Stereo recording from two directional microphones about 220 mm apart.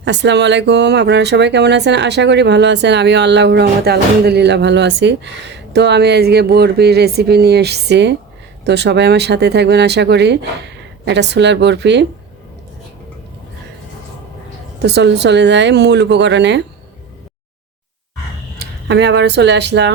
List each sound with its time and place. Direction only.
0.0 s speech: 55° right (ahead or behind)
14.8 s speech: 50° right (ahead or behind)
18.6 s speech: 50° right (ahead or behind)